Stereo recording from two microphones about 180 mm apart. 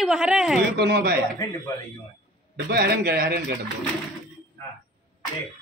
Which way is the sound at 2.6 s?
60° right (ahead or behind).